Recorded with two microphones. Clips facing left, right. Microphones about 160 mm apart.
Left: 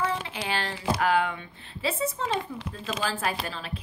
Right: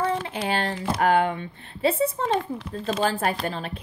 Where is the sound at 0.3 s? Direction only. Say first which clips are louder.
Right 5 dB; 50° right (ahead or behind).